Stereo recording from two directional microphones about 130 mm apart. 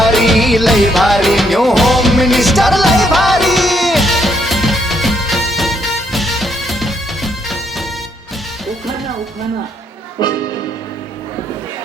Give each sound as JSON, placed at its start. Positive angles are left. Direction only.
{"t": 0.0, "sound": "music", "side_deg": 0}
{"t": 10.2, "sound": "music", "side_deg": 35}